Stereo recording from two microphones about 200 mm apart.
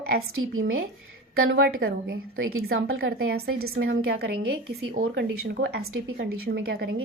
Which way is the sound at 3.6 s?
80° right.